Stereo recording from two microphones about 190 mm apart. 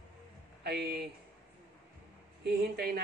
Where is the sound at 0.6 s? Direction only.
60° right (ahead or behind).